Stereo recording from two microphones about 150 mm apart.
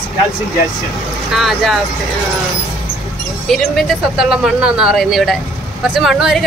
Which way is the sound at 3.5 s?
Centre (ahead or behind).